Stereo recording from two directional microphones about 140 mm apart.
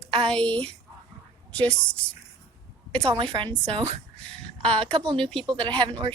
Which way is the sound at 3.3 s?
35° right (ahead or behind).